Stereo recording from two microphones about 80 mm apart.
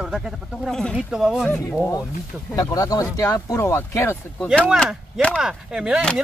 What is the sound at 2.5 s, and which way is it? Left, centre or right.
Speech, left.